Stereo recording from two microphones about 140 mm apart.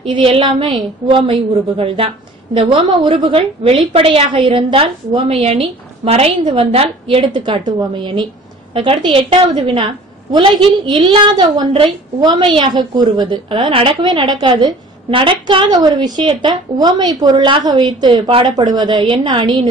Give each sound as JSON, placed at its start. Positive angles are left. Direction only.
{"t": 0.0, "sound": "a woman's voice", "side_deg": -40}